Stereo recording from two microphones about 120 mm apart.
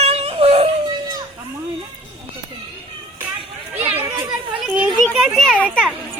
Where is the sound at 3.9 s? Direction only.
15° right (ahead or behind).